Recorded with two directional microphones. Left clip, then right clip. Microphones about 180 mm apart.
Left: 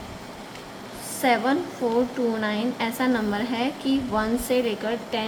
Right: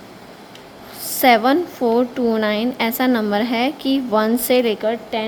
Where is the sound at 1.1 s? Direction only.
50° right (ahead or behind).